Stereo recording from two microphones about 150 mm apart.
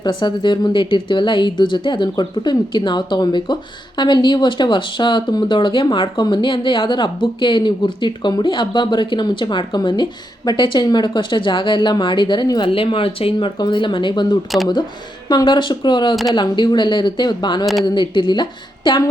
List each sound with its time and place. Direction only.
0.0 s a woman's voice: 30° left (ahead or behind)